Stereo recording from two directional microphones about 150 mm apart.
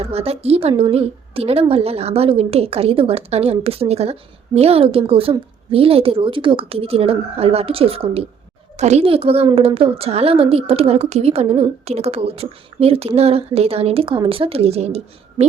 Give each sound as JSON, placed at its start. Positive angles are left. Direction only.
{"t": 0.0, "sound": "a woman's voice", "side_deg": -40}